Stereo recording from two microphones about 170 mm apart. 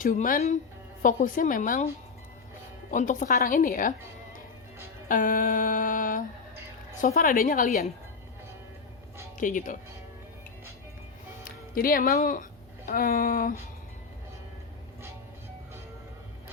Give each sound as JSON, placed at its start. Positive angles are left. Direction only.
{"t": 0.0, "sound": "mantra", "side_deg": 50}
{"t": 2.9, "sound": "mantra", "side_deg": 50}
{"t": 5.0, "sound": "mantra", "side_deg": 50}
{"t": 9.4, "sound": "mantra", "side_deg": 50}
{"t": 11.7, "sound": "speech", "side_deg": 55}